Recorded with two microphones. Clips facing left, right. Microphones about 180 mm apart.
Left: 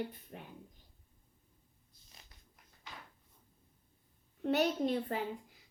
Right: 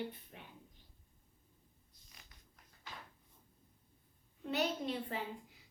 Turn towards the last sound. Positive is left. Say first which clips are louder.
# left 6 dB
turn(degrees=45)  # may be behind; listen again after turning